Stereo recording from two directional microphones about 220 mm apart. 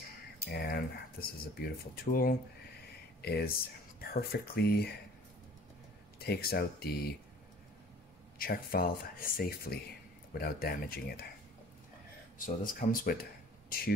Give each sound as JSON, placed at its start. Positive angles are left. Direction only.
{"t": 0.5, "sound": "speech", "side_deg": 45}
{"t": 6.1, "sound": "speech", "side_deg": 45}
{"t": 8.4, "sound": "speech", "side_deg": 40}
{"t": 12.4, "sound": "speech", "side_deg": 40}